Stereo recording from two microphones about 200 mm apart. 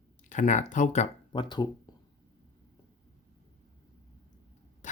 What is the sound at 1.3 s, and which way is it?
Speech, 20° left (ahead or behind).